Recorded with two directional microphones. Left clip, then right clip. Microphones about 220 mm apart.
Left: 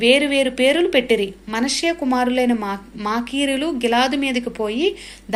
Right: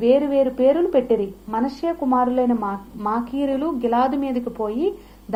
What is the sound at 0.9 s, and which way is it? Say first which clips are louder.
Speech: left 2 dB; 30° left (ahead or behind).